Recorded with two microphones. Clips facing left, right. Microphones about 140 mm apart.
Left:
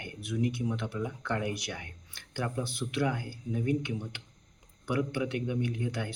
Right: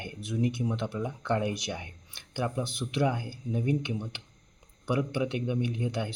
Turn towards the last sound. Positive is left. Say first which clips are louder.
# right 2 dB
turn(degrees=-20)  # may be behind; listen again after turning